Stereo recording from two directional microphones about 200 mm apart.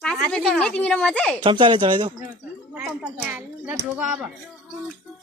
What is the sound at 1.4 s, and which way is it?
Speech, 25° right (ahead or behind).